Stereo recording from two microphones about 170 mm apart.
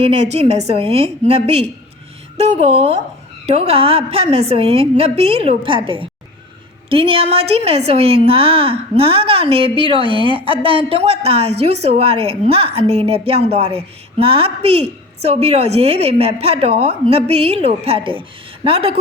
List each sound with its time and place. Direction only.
0.0 s a woman's voice: 40° right (ahead or behind)